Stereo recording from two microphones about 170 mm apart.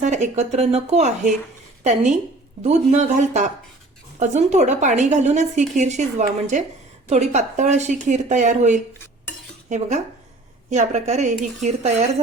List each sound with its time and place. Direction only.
0.0 s a woman's voice: 45° right (ahead or behind)
2.6 s a woman's voice: 40° right (ahead or behind)